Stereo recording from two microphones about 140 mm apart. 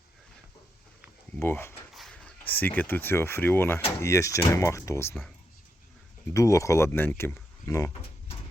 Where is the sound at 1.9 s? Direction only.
Centre (ahead or behind).